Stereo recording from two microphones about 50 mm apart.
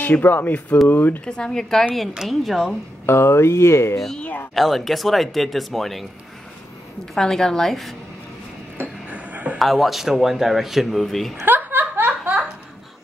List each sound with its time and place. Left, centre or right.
0.0 s speech: left
1.2 s a woman's voice: centre
3.1 s speech: left
4.6 s speech: centre
7.2 s a woman's voice: centre
9.1 s a sound: right
9.6 s speech: centre
11.4 s snicker: right